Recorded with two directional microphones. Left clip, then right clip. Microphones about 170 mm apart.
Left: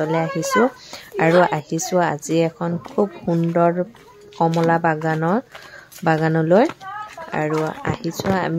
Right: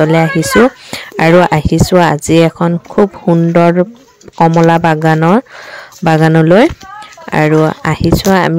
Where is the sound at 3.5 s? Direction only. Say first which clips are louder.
Right 7 dB; 65° right (ahead or behind).